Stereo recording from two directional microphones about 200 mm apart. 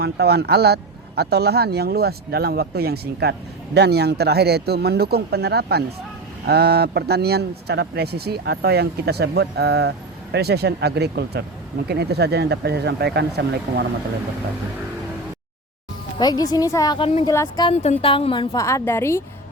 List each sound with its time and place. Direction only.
0.0 s speech: 55° right (ahead or behind)
16.1 s a woman's voice: 20° left (ahead or behind)
17.2 s a woman's voice: 15° left (ahead or behind)
17.7 s a woman's voice: 25° left (ahead or behind); by 19.2 s 10° left (ahead or behind)